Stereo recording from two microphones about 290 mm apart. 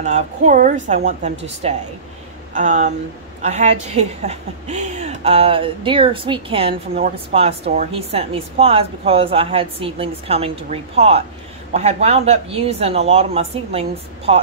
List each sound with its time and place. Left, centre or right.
0.0 s a woman's voice: right